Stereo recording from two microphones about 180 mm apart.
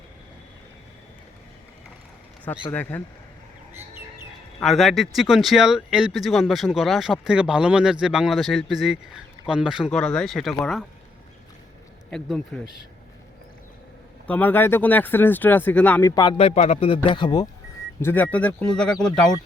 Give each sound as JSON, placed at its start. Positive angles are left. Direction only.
{"t": 2.7, "sound": "speech", "side_deg": 10}
{"t": 4.6, "sound": "speech", "side_deg": 0}
{"t": 12.1, "sound": "speech", "side_deg": 0}
{"t": 14.3, "sound": "speech", "side_deg": 10}
{"t": 16.4, "sound": "speech", "side_deg": 35}
{"t": 18.0, "sound": "speech", "side_deg": 10}